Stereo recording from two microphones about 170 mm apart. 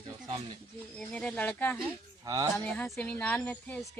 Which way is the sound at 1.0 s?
5° left (ahead or behind).